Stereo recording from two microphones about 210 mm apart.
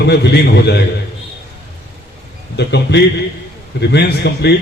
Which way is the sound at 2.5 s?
55° left (ahead or behind).